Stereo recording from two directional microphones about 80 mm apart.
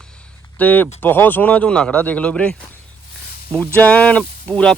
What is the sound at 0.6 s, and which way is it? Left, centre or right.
Speech, left.